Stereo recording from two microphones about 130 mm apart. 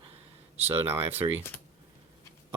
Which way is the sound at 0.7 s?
15° right (ahead or behind).